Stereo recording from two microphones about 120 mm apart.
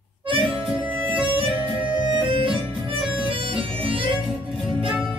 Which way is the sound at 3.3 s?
50° right (ahead or behind).